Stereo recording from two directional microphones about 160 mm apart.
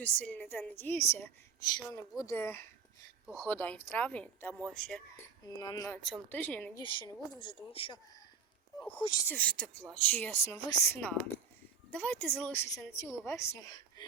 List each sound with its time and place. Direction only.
0.0 s a woman's voice: 10° left (ahead or behind)
5.5 s speech: 25° left (ahead or behind)
6.3 s a woman's voice: 10° left (ahead or behind)
6.7 s speech: 30° left (ahead or behind)
9.2 s a woman's voice: 10° left (ahead or behind)